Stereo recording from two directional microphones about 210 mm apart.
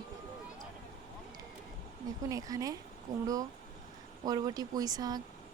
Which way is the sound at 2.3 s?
15° right (ahead or behind).